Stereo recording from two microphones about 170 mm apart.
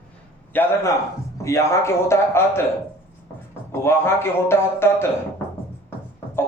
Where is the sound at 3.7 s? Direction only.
15° left (ahead or behind).